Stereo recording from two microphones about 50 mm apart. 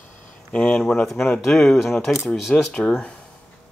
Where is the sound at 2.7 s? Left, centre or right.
Centre.